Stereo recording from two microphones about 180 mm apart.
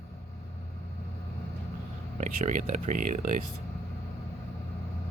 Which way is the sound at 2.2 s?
45° right (ahead or behind).